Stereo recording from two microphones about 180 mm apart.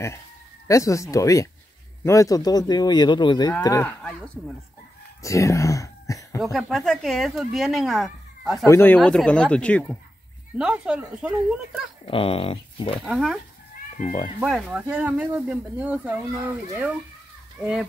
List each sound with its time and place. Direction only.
0.7 s speech: 15° left (ahead or behind)
5.2 s speech: 15° left (ahead or behind)
6.4 s speech: centre (ahead or behind)
8.6 s speech: 10° left (ahead or behind)
10.6 s speech: 5° right (ahead or behind)
12.1 s speech: 30° left (ahead or behind)
13.0 s speech: centre (ahead or behind)
14.0 s speech: 25° left (ahead or behind)
14.4 s speech: 5° right (ahead or behind)